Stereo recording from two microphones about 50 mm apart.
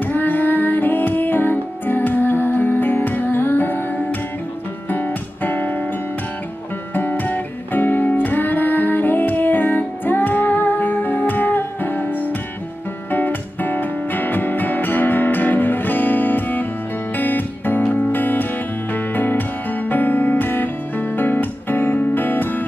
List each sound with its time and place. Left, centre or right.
0.0 s music: left
6.9 s music: left